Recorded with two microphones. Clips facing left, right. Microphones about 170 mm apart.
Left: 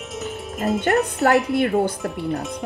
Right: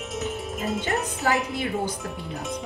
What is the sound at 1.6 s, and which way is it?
Speech, 60° left (ahead or behind).